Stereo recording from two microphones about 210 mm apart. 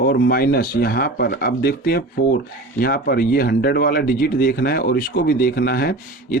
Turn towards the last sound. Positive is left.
turn(degrees=50)  # may be behind; listen again after turning